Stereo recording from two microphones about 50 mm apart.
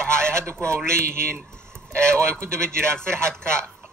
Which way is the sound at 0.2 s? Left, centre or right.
Right.